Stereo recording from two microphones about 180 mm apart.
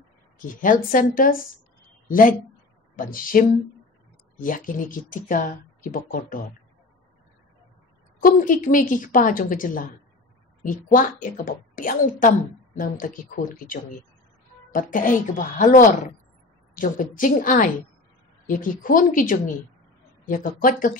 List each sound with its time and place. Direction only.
0.4 s speech: 45° left (ahead or behind)
8.2 s speech: 45° left (ahead or behind)